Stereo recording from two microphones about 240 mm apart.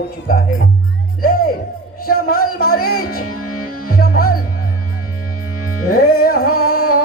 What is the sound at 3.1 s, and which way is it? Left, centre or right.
Music, left.